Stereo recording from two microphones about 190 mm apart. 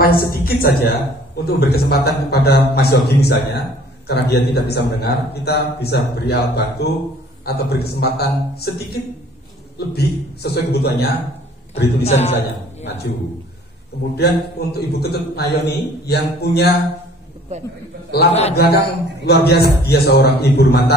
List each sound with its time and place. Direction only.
0.0 s a woman's voice: 50° left (ahead or behind)
12.0 s a man's voice: 35° left (ahead or behind)
12.4 s a man's voice: 60° left (ahead or behind)
14.1 s a man's voice: 55° left (ahead or behind)
18.3 s a man's voice: 35° left (ahead or behind)
19.2 s a man's voice: 60° left (ahead or behind)